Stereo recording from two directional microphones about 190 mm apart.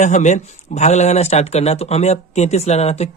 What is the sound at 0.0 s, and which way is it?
Speech, 40° left (ahead or behind).